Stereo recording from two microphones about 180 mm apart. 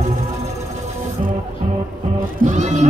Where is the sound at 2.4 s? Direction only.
40° right (ahead or behind).